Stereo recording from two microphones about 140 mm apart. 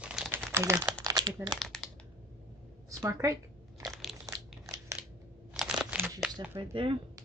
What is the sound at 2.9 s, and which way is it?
Speech, 25° right (ahead or behind).